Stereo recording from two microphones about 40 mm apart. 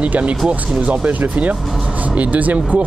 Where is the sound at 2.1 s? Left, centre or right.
Right.